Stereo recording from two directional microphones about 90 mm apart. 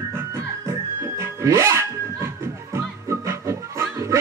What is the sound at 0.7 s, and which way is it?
Music, 30° right (ahead or behind).